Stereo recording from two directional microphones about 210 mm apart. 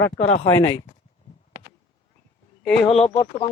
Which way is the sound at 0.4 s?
15° left (ahead or behind).